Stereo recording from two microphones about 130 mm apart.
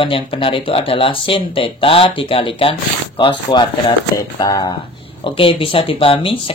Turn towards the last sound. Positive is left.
turn(degrees=45)  # may be behind; listen again after turning